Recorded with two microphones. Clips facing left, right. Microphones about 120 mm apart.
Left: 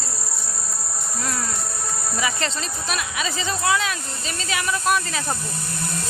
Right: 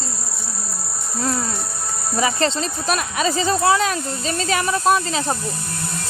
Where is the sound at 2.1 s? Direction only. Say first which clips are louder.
Right 7 dB; 35° right (ahead or behind).